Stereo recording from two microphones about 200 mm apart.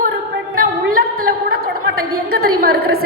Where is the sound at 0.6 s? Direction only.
45° right (ahead or behind).